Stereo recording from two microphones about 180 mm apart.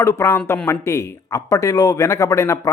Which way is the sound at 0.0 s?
15° left (ahead or behind).